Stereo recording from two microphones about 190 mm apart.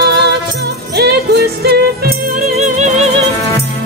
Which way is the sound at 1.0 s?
55° right (ahead or behind).